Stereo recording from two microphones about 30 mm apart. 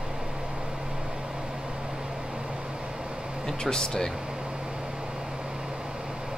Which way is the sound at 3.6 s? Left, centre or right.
Left.